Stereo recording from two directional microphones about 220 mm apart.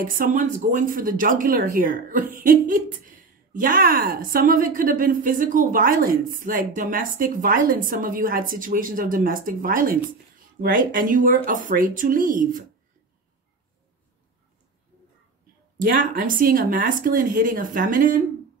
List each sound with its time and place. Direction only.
0.0 s speech: 40° right (ahead or behind)
15.8 s speech: 40° right (ahead or behind)